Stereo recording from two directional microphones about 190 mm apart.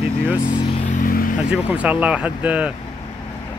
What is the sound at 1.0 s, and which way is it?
Vehicle, 45° left (ahead or behind).